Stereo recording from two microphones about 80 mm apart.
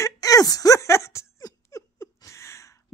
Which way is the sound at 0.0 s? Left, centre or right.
Left.